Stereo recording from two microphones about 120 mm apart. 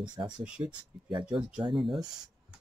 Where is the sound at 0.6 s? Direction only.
40° right (ahead or behind).